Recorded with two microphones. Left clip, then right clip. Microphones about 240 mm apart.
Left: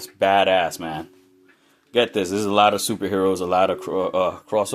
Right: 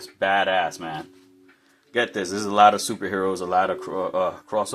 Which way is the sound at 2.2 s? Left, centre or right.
Left.